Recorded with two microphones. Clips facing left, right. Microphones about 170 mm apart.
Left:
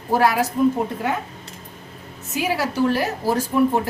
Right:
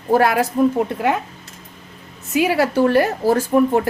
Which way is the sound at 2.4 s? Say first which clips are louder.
Right 5 dB; 60° right (ahead or behind).